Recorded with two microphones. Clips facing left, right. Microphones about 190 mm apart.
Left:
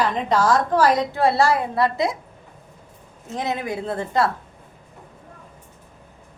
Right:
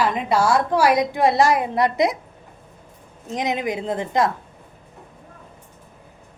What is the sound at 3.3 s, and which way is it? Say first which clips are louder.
A woman's voice: right 2 dB; 15° right (ahead or behind).